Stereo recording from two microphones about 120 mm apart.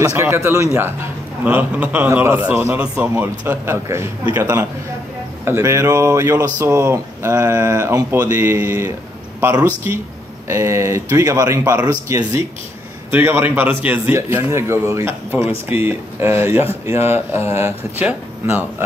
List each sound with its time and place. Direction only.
0.0 s a man's voice: 25° right (ahead or behind)
10.5 s speech: 25° right (ahead or behind)
13.1 s speech: 20° right (ahead or behind)